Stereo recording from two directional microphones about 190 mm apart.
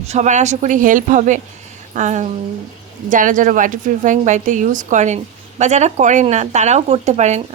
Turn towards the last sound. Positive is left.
turn(degrees=-35)  # may be behind; listen again after turning